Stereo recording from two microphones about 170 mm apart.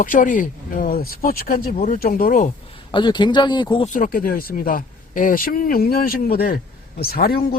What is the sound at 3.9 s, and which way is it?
Speech, 55° left (ahead or behind).